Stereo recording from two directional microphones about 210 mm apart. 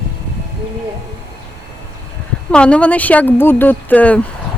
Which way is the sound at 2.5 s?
5° left (ahead or behind).